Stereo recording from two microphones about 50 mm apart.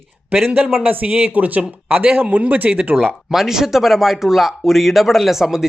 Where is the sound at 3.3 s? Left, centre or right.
Centre.